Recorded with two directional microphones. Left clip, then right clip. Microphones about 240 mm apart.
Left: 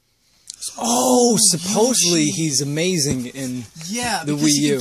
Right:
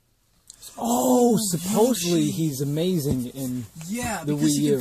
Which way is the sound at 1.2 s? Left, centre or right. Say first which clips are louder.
Left 5 dB; left.